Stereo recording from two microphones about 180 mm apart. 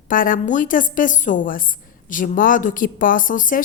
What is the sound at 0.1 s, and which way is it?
A woman's voice, 50° left (ahead or behind).